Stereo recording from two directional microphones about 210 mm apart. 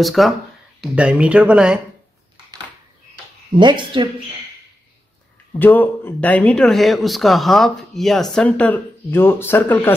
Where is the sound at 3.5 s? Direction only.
20° right (ahead or behind).